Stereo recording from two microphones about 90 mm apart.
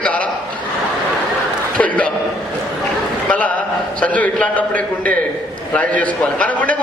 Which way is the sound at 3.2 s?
15° left (ahead or behind).